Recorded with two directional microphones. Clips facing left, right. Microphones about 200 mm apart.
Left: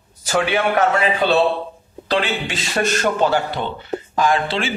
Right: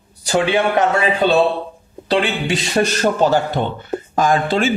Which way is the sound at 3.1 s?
40° right (ahead or behind).